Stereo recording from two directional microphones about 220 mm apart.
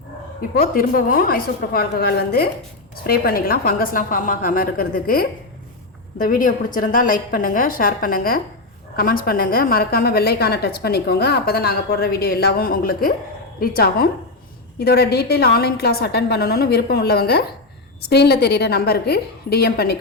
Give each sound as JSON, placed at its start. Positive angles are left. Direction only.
{"t": 0.5, "sound": "a woman's voice", "side_deg": 40}